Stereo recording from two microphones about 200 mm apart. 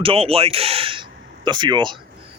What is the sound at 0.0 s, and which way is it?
Speech, 30° right (ahead or behind).